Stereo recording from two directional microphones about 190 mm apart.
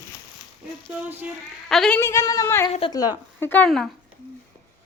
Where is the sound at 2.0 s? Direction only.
15° left (ahead or behind).